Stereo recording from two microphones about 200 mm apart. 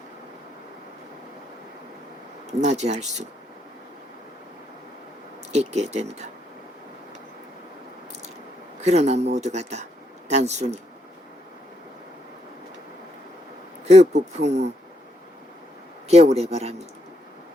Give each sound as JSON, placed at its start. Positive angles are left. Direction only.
{"t": 2.5, "sound": "speech", "side_deg": -35}
{"t": 5.5, "sound": "speech", "side_deg": -35}
{"t": 8.8, "sound": "speech", "side_deg": -35}
{"t": 13.8, "sound": "speech", "side_deg": -35}
{"t": 16.0, "sound": "speech", "side_deg": -30}